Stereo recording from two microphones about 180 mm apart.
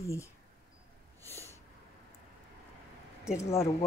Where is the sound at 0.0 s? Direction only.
15° left (ahead or behind).